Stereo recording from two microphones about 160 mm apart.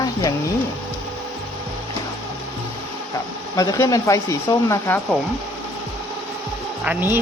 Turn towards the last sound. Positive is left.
turn(degrees=-15)  # may be behind; listen again after turning